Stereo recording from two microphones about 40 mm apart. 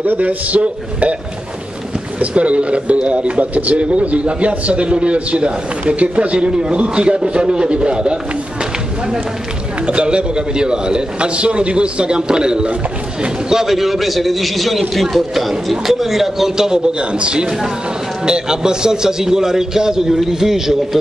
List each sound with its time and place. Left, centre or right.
0.2 s a man's voice: right
2.1 s speech: right
9.8 s a man's voice: right; by 21.0 s centre